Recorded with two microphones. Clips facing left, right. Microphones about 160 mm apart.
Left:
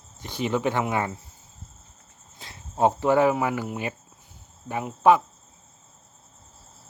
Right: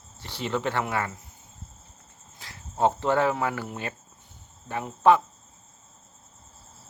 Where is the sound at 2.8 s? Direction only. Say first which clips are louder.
Left 3 dB; 10° left (ahead or behind).